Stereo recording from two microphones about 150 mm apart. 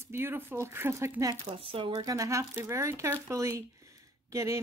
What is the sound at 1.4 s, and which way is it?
Speech, 40° right (ahead or behind).